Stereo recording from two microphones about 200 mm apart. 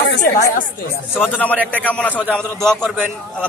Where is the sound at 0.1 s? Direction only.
50° left (ahead or behind).